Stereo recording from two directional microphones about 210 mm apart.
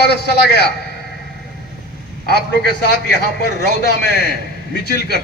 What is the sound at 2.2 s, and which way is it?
Speech, 50° left (ahead or behind).